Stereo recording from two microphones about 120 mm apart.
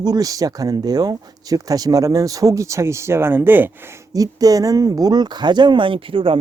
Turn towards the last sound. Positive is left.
turn(degrees=-50)  # may be behind; listen again after turning